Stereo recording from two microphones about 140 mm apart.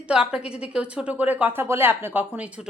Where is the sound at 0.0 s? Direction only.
5° right (ahead or behind).